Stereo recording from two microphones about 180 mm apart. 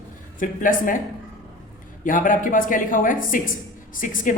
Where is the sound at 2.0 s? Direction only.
50° left (ahead or behind).